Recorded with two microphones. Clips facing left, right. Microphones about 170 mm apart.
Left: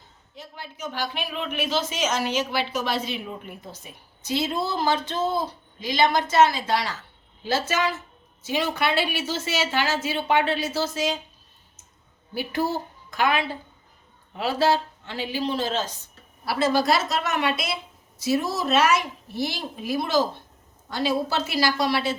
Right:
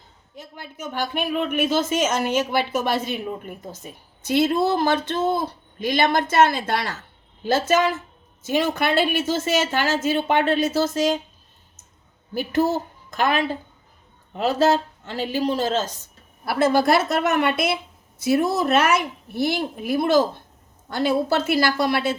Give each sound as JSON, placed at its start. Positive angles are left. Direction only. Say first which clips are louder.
{"t": 0.3, "sound": "speech", "louder": "right 2 dB", "side_deg": -50}
{"t": 12.3, "sound": "speech", "louder": "right 5 dB", "side_deg": -45}
{"t": 16.5, "sound": "a woman's voice", "louder": "right 4 dB", "side_deg": -55}